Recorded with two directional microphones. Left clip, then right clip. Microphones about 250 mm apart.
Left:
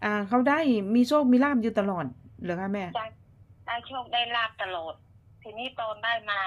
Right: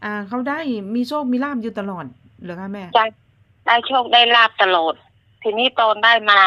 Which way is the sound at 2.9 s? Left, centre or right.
Right.